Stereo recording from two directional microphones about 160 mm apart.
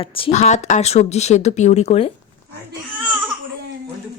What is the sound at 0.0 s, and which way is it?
Speech, 35° left (ahead or behind).